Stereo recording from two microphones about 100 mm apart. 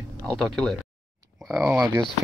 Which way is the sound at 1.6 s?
10° right (ahead or behind).